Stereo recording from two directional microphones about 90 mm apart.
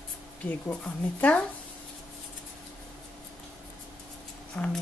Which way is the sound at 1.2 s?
15° left (ahead or behind).